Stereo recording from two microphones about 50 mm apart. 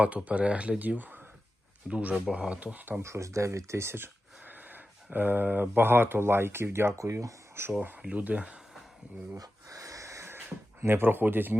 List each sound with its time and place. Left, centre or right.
0.3 s speech: right
0.8 s speech: right
3.0 s speech: right
6.7 s speech: right
7.7 s speech: right
9.3 s a sound: right
10.8 s speech: right